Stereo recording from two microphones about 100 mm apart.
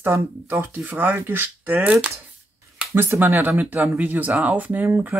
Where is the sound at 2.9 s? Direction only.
20° right (ahead or behind).